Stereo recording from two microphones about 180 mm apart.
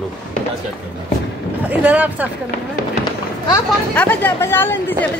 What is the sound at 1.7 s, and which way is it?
Speech, 10° right (ahead or behind).